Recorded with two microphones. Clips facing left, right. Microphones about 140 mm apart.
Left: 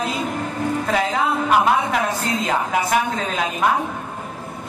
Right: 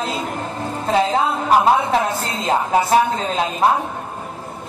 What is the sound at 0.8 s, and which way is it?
A woman's voice, 30° right (ahead or behind).